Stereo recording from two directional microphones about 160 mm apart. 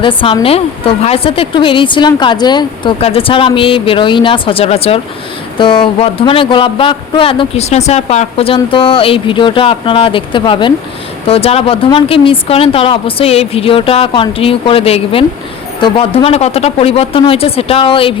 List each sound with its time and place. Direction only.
0.0 s speech: 30° left (ahead or behind)